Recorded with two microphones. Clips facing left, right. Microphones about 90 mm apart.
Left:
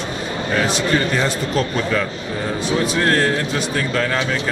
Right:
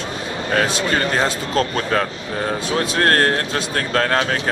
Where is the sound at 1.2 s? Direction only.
40° right (ahead or behind).